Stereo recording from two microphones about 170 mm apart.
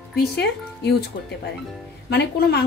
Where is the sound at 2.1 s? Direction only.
75° left (ahead or behind).